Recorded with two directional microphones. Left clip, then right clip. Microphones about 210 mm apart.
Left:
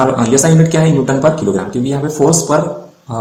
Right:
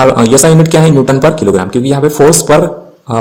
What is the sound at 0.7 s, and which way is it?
Speech, 55° right (ahead or behind).